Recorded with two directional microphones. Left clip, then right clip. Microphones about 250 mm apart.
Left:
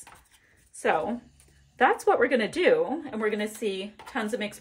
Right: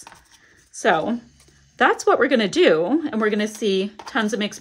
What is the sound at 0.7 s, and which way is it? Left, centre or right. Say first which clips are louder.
A woman's voice: right 6 dB; centre.